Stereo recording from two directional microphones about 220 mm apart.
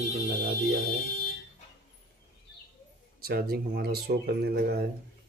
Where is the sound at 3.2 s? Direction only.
45° right (ahead or behind).